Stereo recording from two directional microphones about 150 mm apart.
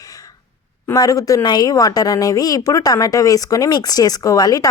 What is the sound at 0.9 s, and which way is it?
A woman's voice, 25° left (ahead or behind).